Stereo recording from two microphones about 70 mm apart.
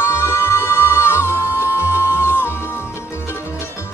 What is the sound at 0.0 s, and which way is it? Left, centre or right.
Music, left.